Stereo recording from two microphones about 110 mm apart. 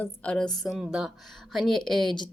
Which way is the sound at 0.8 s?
5° right (ahead or behind).